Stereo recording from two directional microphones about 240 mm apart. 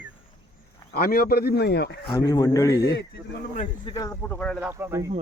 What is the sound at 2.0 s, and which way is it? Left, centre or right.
Speech, centre.